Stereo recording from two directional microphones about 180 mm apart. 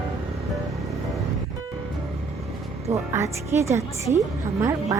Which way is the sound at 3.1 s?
15° right (ahead or behind).